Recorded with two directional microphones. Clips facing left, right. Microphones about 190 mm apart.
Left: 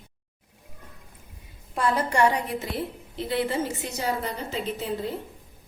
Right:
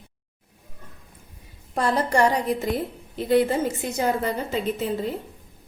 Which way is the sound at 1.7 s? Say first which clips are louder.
Right 2 dB; 35° right (ahead or behind).